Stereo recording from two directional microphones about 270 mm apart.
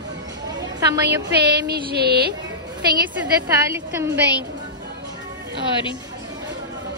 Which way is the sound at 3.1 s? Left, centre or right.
Centre.